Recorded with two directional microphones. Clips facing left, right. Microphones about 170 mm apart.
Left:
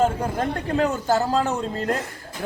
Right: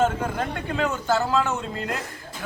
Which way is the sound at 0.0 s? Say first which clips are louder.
Left 2 dB; 35° left (ahead or behind).